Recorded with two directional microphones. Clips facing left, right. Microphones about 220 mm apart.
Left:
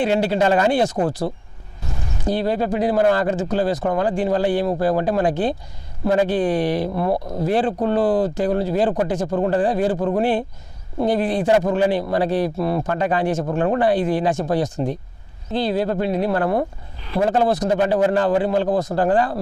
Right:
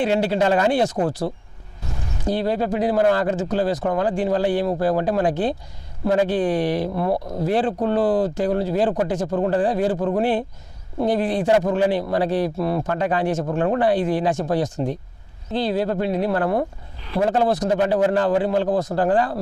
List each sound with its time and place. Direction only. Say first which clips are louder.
0.0 s speech: left 1 dB; 10° left (ahead or behind)
0.9 s speech: left 1 dB; 35° left (ahead or behind)
2.2 s speech: left 1 dB; 10° left (ahead or behind)